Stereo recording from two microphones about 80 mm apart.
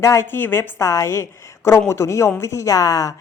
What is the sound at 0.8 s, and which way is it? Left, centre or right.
Speech, left.